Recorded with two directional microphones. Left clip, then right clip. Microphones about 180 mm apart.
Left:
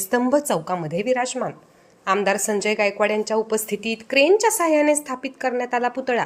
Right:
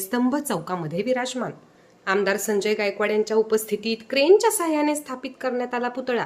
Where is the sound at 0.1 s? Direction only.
10° left (ahead or behind).